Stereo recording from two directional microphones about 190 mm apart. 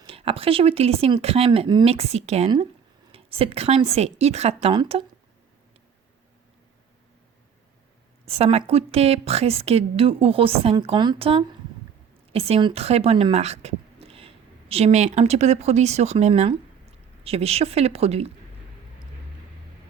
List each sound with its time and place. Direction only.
0.0 s a woman's voice: 30° right (ahead or behind)
8.2 s a woman's voice: 30° right (ahead or behind)